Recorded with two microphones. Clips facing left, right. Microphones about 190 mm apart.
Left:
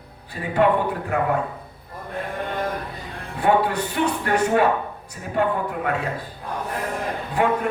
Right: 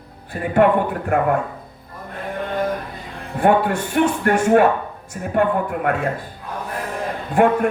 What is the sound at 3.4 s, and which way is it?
A woman's voice, 50° right (ahead or behind).